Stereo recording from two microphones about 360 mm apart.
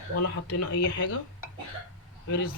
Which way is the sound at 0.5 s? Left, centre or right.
Left.